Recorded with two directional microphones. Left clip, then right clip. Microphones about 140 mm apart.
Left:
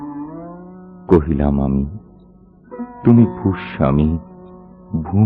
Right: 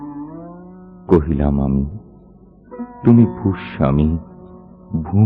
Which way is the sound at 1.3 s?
30° left (ahead or behind).